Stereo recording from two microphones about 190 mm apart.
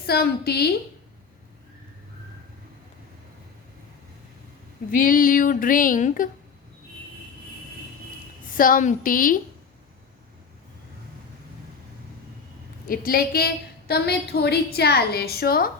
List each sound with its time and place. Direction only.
0.0 s a woman's voice: 55° left (ahead or behind)
4.9 s speech: 45° left (ahead or behind)
8.5 s speech: 45° left (ahead or behind)
12.9 s a woman's voice: 50° left (ahead or behind)